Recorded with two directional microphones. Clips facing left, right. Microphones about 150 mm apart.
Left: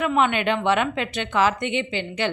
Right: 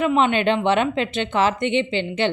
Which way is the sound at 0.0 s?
25° right (ahead or behind).